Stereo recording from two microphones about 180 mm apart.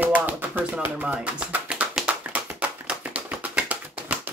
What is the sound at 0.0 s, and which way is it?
Tap, 10° right (ahead or behind).